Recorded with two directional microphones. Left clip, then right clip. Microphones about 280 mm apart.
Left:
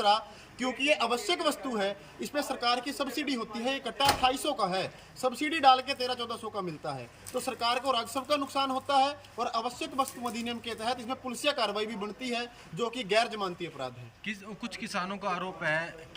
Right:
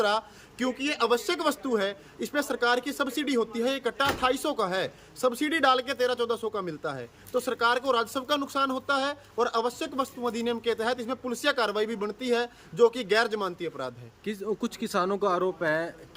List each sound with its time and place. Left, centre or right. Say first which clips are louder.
0.6 s a man's voice: even; centre
14.3 s speech: right 7 dB; right